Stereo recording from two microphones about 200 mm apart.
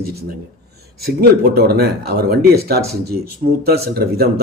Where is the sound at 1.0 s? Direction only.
50° right (ahead or behind).